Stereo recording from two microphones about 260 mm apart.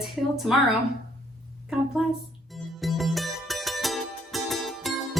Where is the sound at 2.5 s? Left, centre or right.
Centre.